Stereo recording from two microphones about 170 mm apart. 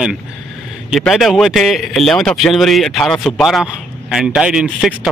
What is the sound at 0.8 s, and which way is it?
Speech, centre (ahead or behind).